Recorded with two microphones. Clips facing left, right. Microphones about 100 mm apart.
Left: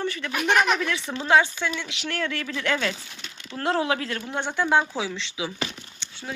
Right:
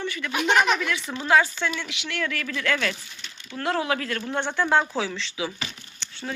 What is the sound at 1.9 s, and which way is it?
Speech, 35° left (ahead or behind).